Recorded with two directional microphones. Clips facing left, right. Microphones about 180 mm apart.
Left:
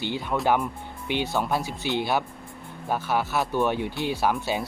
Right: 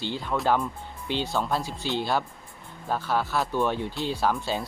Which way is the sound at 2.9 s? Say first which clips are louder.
Left 1 dB; 5° left (ahead or behind).